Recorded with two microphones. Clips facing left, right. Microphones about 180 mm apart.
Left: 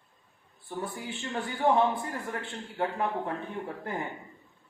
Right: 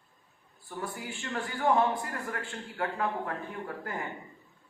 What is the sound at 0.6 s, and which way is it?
Speech, 25° left (ahead or behind).